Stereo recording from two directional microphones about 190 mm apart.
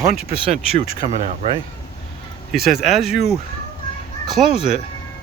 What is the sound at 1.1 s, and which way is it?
Speech, 35° right (ahead or behind).